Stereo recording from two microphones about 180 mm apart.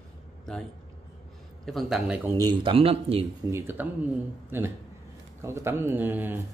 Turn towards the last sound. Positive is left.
turn(degrees=-10)  # may be behind; listen again after turning